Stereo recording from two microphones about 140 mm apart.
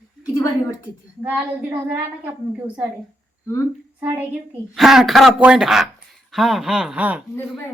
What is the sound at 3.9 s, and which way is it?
Speech, 15° right (ahead or behind).